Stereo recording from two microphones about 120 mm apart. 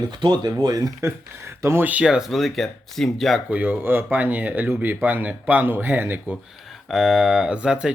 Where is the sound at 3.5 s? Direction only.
15° right (ahead or behind).